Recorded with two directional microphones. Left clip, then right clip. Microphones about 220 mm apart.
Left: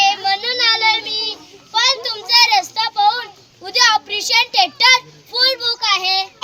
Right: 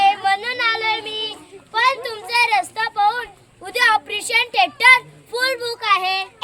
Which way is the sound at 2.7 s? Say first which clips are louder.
Left 3 dB; centre (ahead or behind).